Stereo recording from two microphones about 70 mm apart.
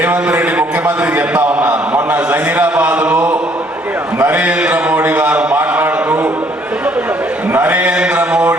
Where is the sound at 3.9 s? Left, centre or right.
Right.